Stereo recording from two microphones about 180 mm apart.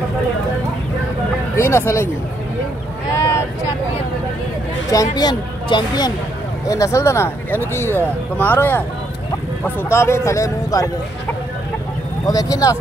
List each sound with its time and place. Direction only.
1.6 s speech: 15° left (ahead or behind)
5.1 s speech: 25° left (ahead or behind)
12.3 s speech: 20° left (ahead or behind)